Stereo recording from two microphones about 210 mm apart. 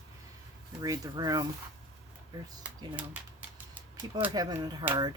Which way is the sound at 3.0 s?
5° right (ahead or behind).